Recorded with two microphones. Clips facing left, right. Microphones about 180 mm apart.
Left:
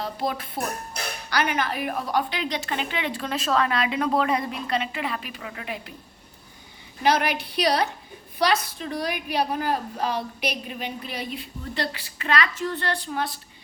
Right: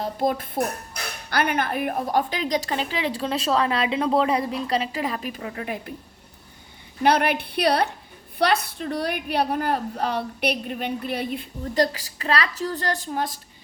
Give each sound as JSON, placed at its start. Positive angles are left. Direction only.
{"t": 0.0, "sound": "a woman's voice", "side_deg": -50}
{"t": 7.0, "sound": "a woman's voice", "side_deg": -55}